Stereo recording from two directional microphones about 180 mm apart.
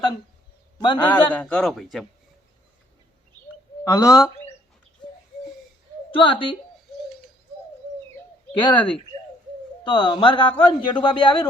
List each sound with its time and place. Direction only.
0.8 s a man's voice: 25° left (ahead or behind)
1.3 s a man's voice: 5° left (ahead or behind)
3.8 s speech: 15° left (ahead or behind)
6.1 s a man's voice: 30° left (ahead or behind)
8.5 s a man's voice: 25° left (ahead or behind)